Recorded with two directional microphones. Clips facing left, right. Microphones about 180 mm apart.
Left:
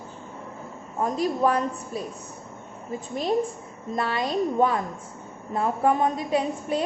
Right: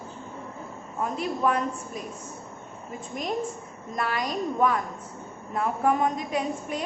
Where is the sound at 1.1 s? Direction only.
35° left (ahead or behind).